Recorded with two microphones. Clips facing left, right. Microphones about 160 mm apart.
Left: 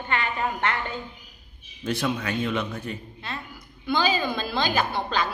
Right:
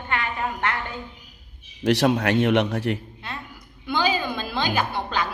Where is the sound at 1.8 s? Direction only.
80° right.